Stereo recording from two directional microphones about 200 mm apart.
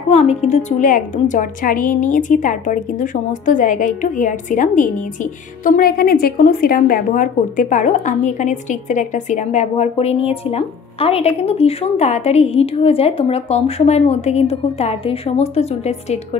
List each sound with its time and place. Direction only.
0.1 s a woman's voice: 35° left (ahead or behind)